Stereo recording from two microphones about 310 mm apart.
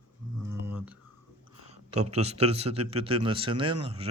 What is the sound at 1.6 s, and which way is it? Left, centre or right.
A man's voice, right.